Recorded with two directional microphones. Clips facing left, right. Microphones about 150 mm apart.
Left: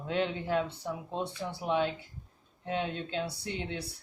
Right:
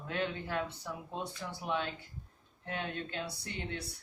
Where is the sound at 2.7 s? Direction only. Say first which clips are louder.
Left 5 dB; 25° left (ahead or behind).